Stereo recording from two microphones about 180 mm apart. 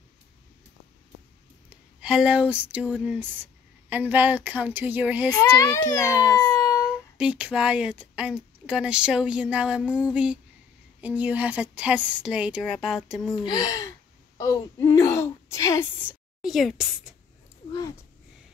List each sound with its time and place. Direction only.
2.0 s speech: 5° right (ahead or behind)
5.3 s a child's voice: 20° left (ahead or behind)
6.4 s child singing: 20° left (ahead or behind)
7.2 s speech: 5° right (ahead or behind)
13.3 s speech: 20° left (ahead or behind)
16.3 s a woman's voice: centre (ahead or behind)